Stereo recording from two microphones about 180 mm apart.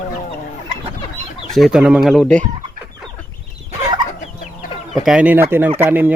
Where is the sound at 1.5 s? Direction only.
Centre (ahead or behind).